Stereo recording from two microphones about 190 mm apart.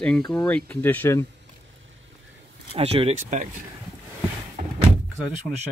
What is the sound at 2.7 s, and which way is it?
Speech, 30° right (ahead or behind).